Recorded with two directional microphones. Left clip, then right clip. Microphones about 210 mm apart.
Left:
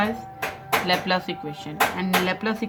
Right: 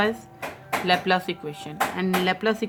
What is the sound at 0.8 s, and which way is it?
Speech, 20° right (ahead or behind).